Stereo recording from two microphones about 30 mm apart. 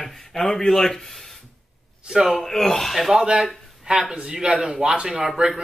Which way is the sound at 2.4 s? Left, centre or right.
Centre.